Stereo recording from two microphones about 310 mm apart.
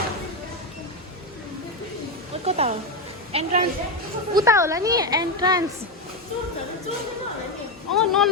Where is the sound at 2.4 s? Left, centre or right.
Centre.